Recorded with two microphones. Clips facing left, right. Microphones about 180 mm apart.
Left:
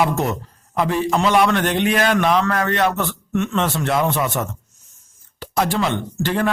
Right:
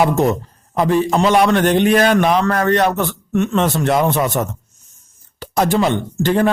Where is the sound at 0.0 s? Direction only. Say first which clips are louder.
Right 5 dB; 35° right (ahead or behind).